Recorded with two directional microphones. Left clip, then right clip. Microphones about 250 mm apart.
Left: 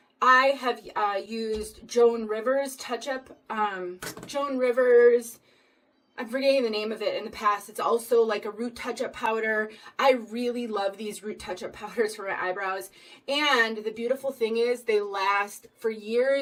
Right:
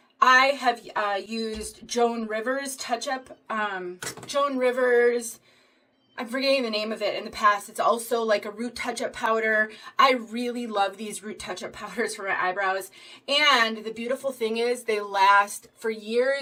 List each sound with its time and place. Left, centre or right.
0.2 s speech: centre